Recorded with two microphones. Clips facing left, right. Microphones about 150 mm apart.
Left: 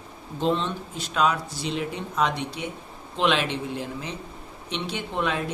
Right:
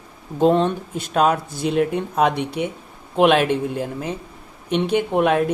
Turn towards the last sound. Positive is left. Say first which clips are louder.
# right 10 dB
turn(degrees=-55)  # may be behind; listen again after turning